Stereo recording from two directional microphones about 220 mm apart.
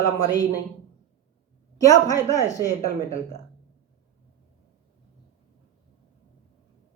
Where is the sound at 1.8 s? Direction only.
15° left (ahead or behind).